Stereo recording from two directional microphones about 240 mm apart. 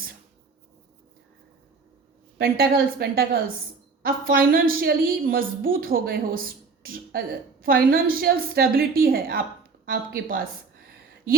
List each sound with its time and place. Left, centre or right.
2.4 s a woman's voice: right